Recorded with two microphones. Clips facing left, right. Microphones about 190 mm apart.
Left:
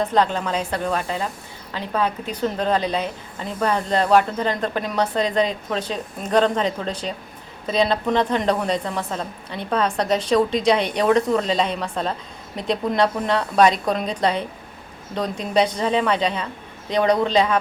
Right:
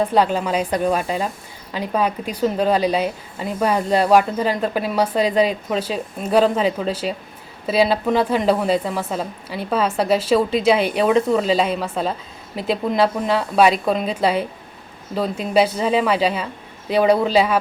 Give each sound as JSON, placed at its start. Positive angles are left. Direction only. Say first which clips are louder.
{"t": 0.0, "sound": "a woman's voice", "louder": "right 2 dB", "side_deg": -10}